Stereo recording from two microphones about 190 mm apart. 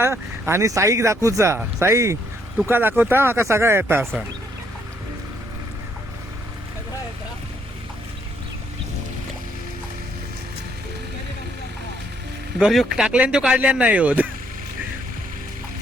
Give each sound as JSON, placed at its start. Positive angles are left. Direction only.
{"t": 0.0, "sound": "speech", "side_deg": -15}
{"t": 12.5, "sound": "speech", "side_deg": 0}